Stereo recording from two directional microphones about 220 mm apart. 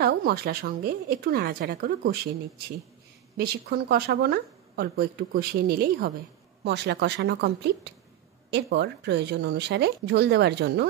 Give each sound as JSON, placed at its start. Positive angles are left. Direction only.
{"t": 0.0, "sound": "speech", "side_deg": -45}
{"t": 3.3, "sound": "speech", "side_deg": -45}